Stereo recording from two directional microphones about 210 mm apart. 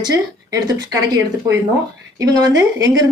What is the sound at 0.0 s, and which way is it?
A woman's voice, 15° right (ahead or behind).